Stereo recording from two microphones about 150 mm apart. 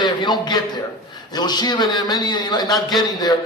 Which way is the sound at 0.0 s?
30° left (ahead or behind).